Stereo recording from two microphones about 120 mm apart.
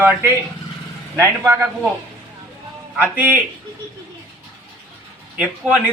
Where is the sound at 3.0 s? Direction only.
15° right (ahead or behind).